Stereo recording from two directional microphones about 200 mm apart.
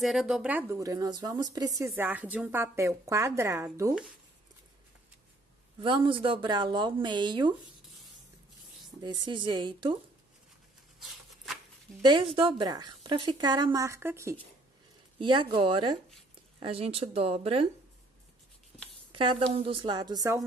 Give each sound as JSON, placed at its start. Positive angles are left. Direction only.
{"t": 0.0, "sound": "a woman's voice", "side_deg": 0}
{"t": 5.8, "sound": "a woman's voice", "side_deg": -25}
{"t": 9.0, "sound": "a woman's voice", "side_deg": -20}
{"t": 11.0, "sound": "a sound", "side_deg": 0}
{"t": 12.0, "sound": "a woman's voice", "side_deg": -20}
{"t": 15.1, "sound": "a woman's voice", "side_deg": -25}
{"t": 19.1, "sound": "a woman's voice", "side_deg": -25}